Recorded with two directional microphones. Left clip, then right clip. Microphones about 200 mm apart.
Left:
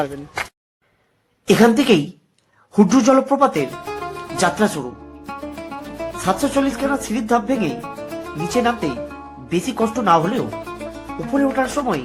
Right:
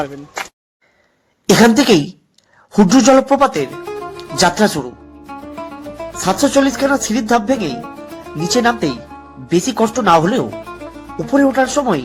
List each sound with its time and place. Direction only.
1.5 s speech: 25° right (ahead or behind)
3.7 s music: centre (ahead or behind)
4.4 s speech: 20° right (ahead or behind)
5.2 s music: centre (ahead or behind)
6.2 s speech: 25° right (ahead or behind)
7.7 s music: centre (ahead or behind)
8.4 s speech: 25° right (ahead or behind)
10.5 s music: centre (ahead or behind)
11.3 s speech: 25° right (ahead or behind)